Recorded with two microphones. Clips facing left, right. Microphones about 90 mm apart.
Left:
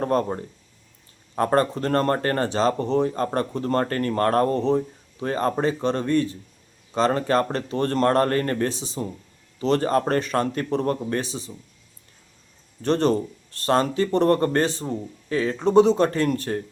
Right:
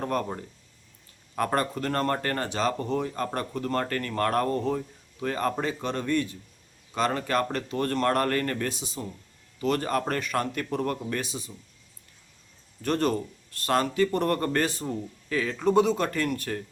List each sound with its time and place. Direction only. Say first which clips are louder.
0.0 s speech: left 6 dB; 35° left (ahead or behind)
1.4 s speech: left 6 dB; 30° left (ahead or behind)
12.8 s speech: left 5 dB; 30° left (ahead or behind)